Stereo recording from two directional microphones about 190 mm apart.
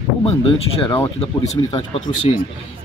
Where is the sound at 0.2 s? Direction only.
30° left (ahead or behind).